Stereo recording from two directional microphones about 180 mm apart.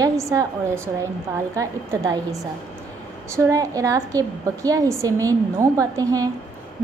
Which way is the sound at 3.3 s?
15° right (ahead or behind).